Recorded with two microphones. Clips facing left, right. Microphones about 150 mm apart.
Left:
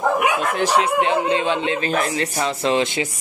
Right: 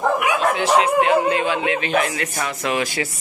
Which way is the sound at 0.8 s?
25° left (ahead or behind).